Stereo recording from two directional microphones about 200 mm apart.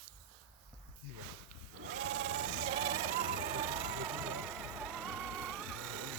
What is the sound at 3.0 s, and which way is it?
Music, 40° right (ahead or behind).